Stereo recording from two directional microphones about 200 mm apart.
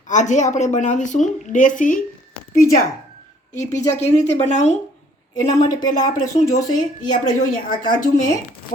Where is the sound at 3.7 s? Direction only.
35° left (ahead or behind).